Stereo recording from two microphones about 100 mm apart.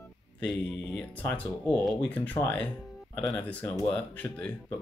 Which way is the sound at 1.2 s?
15° left (ahead or behind).